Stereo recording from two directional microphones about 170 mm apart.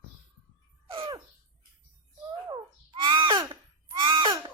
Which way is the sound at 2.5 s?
25° right (ahead or behind).